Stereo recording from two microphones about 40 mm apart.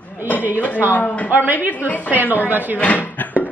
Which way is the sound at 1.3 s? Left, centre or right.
Right.